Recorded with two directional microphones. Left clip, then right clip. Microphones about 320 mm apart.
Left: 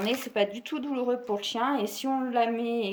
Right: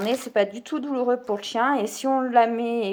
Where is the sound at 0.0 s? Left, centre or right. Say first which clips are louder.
Right 5 dB; centre.